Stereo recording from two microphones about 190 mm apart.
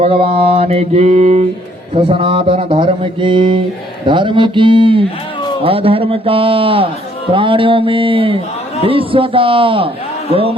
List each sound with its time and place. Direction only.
0.0 s mantra: 30° right (ahead or behind)
2.0 s speech: 30° right (ahead or behind)